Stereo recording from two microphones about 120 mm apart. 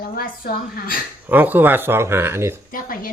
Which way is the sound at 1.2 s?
15° right (ahead or behind).